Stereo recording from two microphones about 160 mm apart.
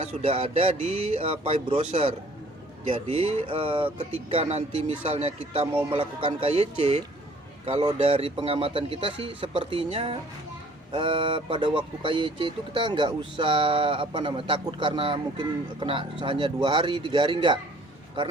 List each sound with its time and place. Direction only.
0.0 s speech: 40° right (ahead or behind)